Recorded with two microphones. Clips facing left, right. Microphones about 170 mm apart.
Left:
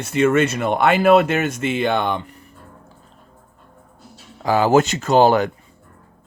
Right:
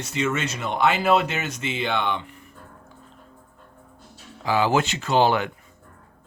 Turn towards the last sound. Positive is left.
turn(degrees=40)  # may be behind; listen again after turning